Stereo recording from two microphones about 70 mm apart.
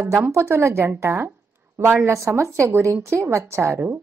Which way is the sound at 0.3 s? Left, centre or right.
Right.